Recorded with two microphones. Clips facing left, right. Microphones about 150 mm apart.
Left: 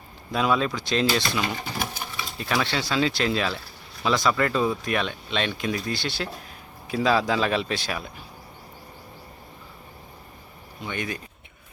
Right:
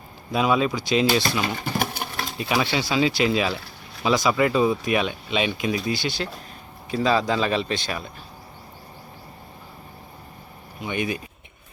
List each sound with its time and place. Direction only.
0.3 s speech: 5° right (ahead or behind)
1.6 s sewing machine: 65° right (ahead or behind)
2.4 s speech: 10° right (ahead or behind)
10.8 s speech: 10° right (ahead or behind)